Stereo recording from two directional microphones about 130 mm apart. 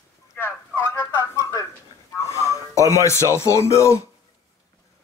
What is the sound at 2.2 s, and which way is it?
Music, 25° left (ahead or behind).